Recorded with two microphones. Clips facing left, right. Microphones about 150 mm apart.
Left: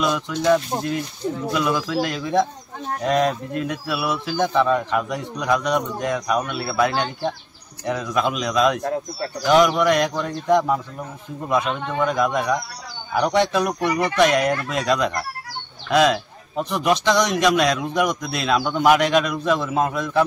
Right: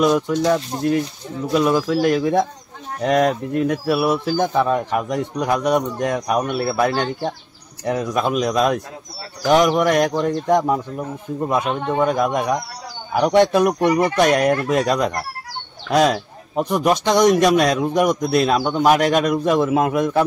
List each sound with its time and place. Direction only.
0.0 s a man's voice: 40° right (ahead or behind)
19.0 s speech: 50° right (ahead or behind)